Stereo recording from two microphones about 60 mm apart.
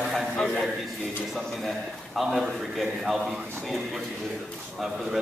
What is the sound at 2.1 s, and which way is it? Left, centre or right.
A man's voice, centre.